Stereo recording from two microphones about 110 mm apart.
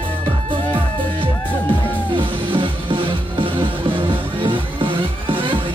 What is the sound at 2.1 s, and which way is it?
Music, 50° right (ahead or behind).